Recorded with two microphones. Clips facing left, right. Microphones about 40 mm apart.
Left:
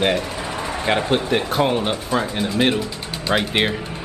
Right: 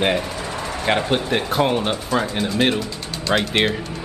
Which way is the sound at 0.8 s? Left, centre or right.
Centre.